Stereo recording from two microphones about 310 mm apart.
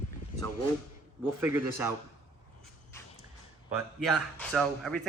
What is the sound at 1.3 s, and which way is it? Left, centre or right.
Speech, centre.